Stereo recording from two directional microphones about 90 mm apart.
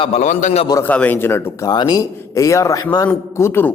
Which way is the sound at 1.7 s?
50° left (ahead or behind).